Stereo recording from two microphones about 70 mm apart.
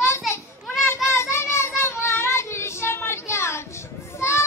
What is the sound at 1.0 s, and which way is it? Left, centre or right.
Child singing, left.